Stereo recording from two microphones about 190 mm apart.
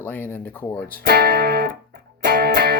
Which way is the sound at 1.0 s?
55° right (ahead or behind).